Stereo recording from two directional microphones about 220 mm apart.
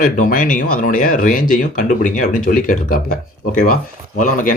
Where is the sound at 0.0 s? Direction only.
35° left (ahead or behind).